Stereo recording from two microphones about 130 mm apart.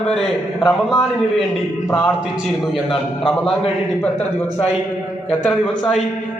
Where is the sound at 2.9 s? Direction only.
5° left (ahead or behind).